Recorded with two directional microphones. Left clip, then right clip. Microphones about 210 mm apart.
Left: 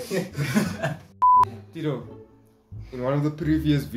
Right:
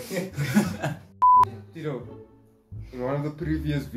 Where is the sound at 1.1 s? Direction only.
Centre (ahead or behind).